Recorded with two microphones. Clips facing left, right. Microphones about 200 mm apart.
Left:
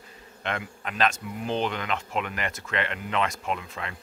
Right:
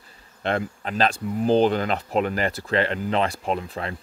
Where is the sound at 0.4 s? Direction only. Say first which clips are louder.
Right 7 dB; 35° right (ahead or behind).